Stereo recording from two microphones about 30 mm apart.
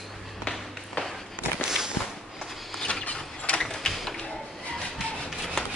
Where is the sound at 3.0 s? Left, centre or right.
Left.